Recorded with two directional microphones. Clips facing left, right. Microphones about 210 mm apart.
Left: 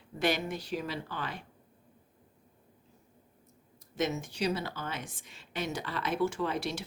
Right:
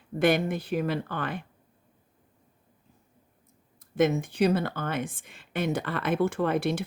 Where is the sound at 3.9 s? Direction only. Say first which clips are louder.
Right 8 dB; 55° right (ahead or behind).